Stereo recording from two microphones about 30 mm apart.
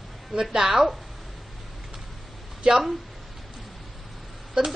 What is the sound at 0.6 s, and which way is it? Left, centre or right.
Speech, centre.